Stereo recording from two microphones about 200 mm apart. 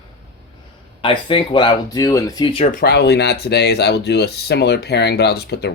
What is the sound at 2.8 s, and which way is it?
Speech, 55° left (ahead or behind).